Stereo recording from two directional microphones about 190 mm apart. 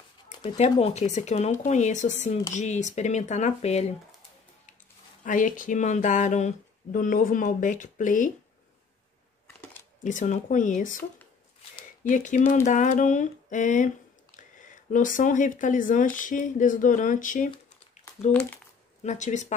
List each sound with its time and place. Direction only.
0.4 s speech: 30° left (ahead or behind)
5.2 s speech: 45° left (ahead or behind)
10.0 s speech: 40° left (ahead or behind)
18.3 s speech: 5° left (ahead or behind)
19.0 s speech: 40° left (ahead or behind)